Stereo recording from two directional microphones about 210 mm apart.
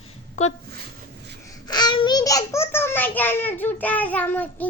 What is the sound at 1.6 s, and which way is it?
Babbling, 20° left (ahead or behind).